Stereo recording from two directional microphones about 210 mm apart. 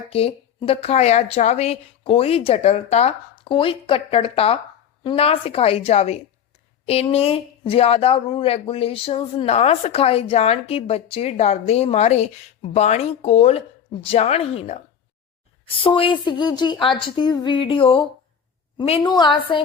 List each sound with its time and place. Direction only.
0.1 s speech: 25° left (ahead or behind)